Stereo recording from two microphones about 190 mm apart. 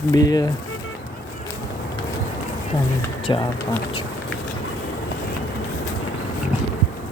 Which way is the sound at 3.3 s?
25° left (ahead or behind).